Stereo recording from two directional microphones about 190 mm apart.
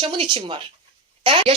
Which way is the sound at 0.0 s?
30° right (ahead or behind).